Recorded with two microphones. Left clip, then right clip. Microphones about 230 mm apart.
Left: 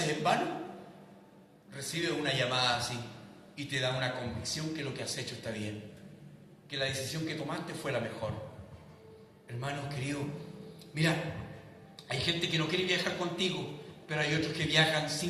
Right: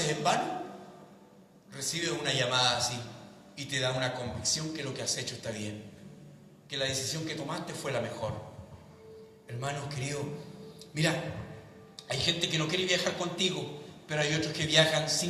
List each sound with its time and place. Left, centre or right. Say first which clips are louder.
0.0 s a man's voice: right 1 dB; right
1.7 s a man's voice: right 1 dB; right
9.5 s a man's voice: right 2 dB; right